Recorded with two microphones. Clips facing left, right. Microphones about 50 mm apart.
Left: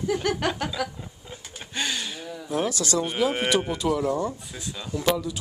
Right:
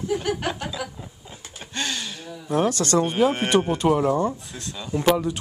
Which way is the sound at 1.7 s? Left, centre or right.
Centre.